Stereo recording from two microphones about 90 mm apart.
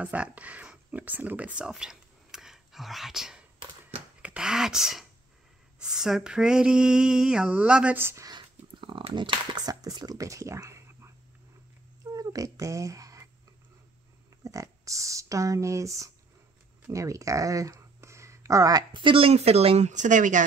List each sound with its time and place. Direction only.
0.0 s speech: 15° right (ahead or behind)
5.8 s a sound: 5° right (ahead or behind)
8.0 s speech: 30° right (ahead or behind)
8.3 s a sound: 60° right (ahead or behind)
9.7 s speech: 45° right (ahead or behind)
12.1 s cat: 40° right (ahead or behind)
14.4 s speech: 35° right (ahead or behind)
18.9 s speech: 75° right (ahead or behind)